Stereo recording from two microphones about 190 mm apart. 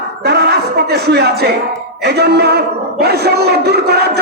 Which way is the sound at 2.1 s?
60° right (ahead or behind).